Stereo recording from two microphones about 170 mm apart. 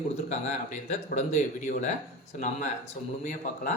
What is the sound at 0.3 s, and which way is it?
Speech, 45° left (ahead or behind).